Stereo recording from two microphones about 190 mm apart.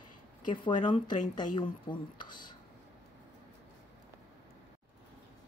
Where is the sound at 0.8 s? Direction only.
25° left (ahead or behind).